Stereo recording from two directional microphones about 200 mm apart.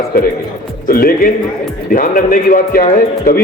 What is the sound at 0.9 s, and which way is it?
A man's voice, 45° left (ahead or behind).